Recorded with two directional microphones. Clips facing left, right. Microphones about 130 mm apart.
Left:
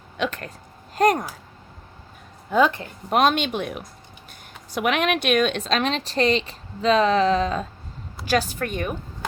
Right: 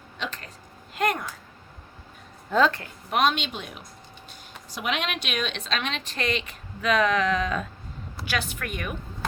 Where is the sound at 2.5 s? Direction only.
15° left (ahead or behind).